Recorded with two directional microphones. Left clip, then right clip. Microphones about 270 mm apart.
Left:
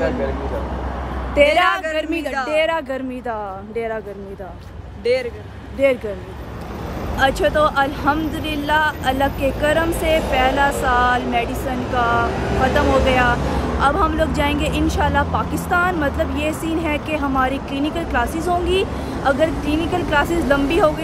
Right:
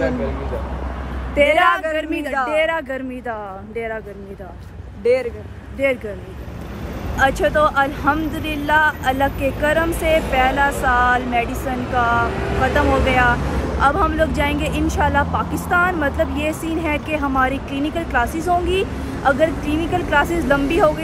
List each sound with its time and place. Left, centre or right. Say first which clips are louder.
2.0 s speech: right 1 dB; centre
5.0 s speech: right 2 dB; centre
7.2 s speech: even; centre
12.3 s speech: left 1 dB; left
13.1 s speech: even; centre